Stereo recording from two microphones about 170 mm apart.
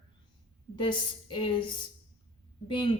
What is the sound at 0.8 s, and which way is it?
Speech, 30° left (ahead or behind).